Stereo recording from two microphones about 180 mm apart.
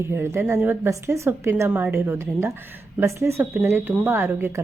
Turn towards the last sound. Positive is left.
turn(degrees=-10)  # may be behind; listen again after turning